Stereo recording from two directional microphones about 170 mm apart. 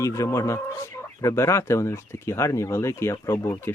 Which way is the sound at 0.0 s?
20° left (ahead or behind).